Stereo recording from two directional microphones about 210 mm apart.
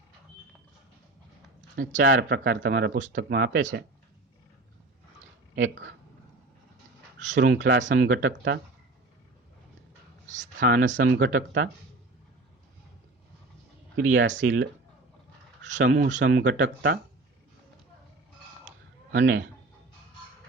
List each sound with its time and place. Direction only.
1.7 s speech: 40° right (ahead or behind)
2.0 s speech: 55° right (ahead or behind)
5.5 s speech: 60° right (ahead or behind)
7.6 s speech: 60° right (ahead or behind)
7.9 s speech: 50° right (ahead or behind)
10.6 s speech: 40° right (ahead or behind)
13.9 s speech: 60° right (ahead or behind)
15.8 s speech: 40° right (ahead or behind)
16.6 s speech: 55° right (ahead or behind)
19.2 s speech: 55° right (ahead or behind)